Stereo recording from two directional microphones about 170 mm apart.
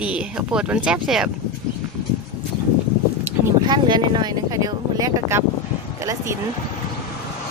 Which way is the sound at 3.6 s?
25° right (ahead or behind).